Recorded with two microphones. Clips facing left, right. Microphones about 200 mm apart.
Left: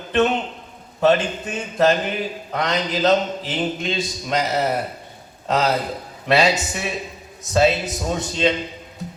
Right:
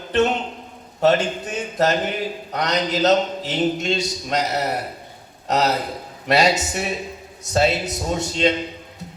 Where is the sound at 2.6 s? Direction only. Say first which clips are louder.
Even; 45° right (ahead or behind).